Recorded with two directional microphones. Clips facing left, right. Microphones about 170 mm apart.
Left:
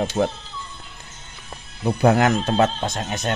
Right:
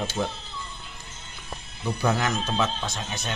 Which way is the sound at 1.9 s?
60° left (ahead or behind).